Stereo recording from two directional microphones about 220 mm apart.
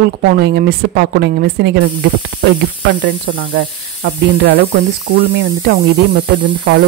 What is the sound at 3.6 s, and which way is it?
Speech, 55° right (ahead or behind).